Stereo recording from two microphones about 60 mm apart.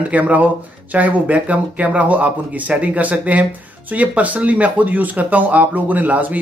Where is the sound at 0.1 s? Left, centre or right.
Right.